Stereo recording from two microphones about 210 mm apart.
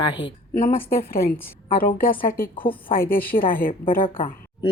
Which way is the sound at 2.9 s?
45° left (ahead or behind).